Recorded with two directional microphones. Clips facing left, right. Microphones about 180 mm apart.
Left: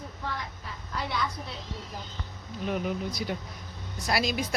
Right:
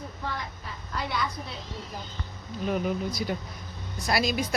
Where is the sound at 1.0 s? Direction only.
Centre (ahead or behind).